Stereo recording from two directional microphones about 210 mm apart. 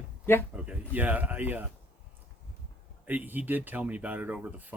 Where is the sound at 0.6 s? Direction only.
5° right (ahead or behind).